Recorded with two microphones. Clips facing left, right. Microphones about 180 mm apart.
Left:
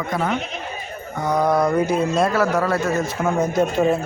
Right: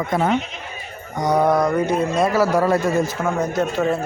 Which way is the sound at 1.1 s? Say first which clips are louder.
Right 2 dB; 10° right (ahead or behind).